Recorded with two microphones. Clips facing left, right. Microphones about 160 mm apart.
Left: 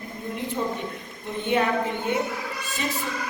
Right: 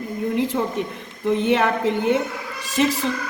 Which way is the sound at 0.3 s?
90° right.